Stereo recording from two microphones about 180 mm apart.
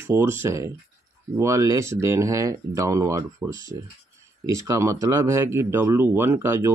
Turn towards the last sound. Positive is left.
turn(degrees=-15)  # may be behind; listen again after turning